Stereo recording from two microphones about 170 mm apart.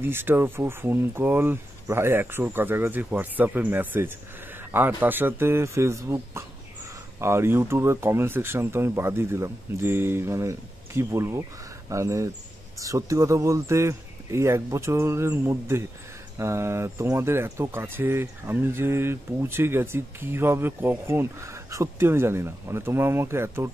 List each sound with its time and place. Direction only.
0.0 s speech: 15° right (ahead or behind)